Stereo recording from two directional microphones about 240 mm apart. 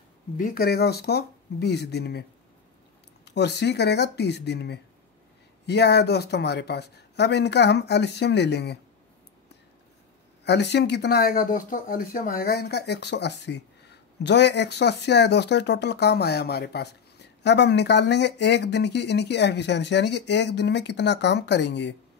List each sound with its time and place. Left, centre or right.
0.4 s speech: left
3.3 s speech: left
10.4 s speech: left